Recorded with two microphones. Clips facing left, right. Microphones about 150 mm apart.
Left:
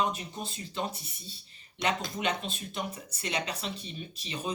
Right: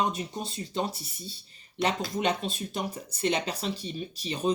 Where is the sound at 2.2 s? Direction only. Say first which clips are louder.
Right 6 dB; 35° right (ahead or behind).